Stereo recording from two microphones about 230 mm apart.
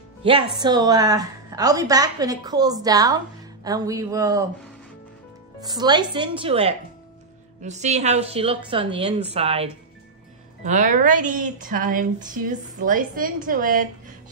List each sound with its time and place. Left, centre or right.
0.2 s a woman's voice: right
5.6 s a woman's voice: centre; by 14.1 s right